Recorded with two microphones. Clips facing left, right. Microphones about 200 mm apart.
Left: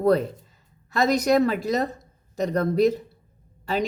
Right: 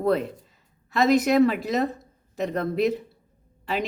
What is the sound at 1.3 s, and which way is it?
Speech, 40° left (ahead or behind).